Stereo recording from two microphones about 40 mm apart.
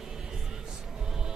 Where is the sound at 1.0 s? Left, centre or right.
Centre.